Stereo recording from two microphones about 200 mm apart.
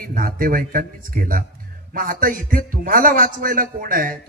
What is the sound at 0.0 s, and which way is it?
A man's voice, 45° right (ahead or behind).